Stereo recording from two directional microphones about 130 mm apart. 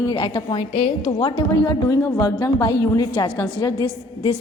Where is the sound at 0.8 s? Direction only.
65° left (ahead or behind).